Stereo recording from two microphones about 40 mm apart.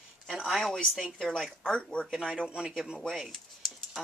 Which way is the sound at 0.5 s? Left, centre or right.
Centre.